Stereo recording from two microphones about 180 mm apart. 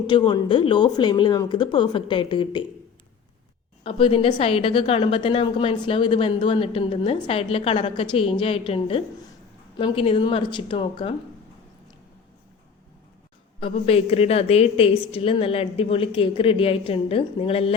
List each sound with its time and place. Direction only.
0.1 s a woman's voice: 25° left (ahead or behind)
3.8 s a woman's voice: 30° left (ahead or behind)
13.6 s a woman's voice: 30° left (ahead or behind)